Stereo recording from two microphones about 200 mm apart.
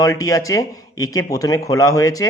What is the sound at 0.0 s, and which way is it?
A man's voice, 15° left (ahead or behind).